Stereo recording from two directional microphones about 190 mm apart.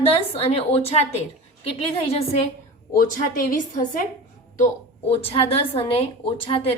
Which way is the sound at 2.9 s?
45° left (ahead or behind).